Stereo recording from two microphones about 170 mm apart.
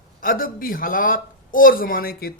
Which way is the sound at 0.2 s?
55° left (ahead or behind).